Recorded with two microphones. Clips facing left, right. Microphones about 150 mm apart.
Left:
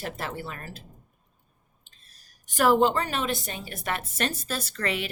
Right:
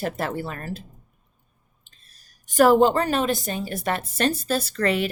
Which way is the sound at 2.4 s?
40° right (ahead or behind).